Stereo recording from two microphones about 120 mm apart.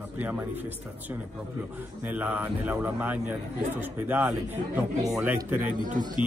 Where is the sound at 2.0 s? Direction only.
15° right (ahead or behind).